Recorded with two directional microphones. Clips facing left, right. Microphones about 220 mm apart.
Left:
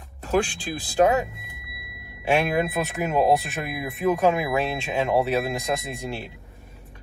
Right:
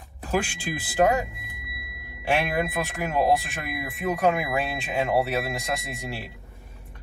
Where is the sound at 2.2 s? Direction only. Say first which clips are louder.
Left 3 dB; centre (ahead or behind).